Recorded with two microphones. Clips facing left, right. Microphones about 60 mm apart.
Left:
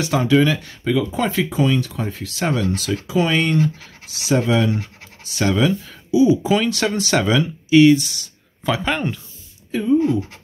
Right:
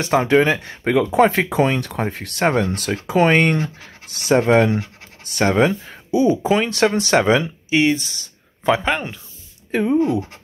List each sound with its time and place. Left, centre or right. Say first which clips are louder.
0.0 s speech: right 1 dB; right
0.8 s speech: right 5 dB; right
6.6 s speech: right 3 dB; right
8.8 s speech: even; centre
9.7 s speech: even; right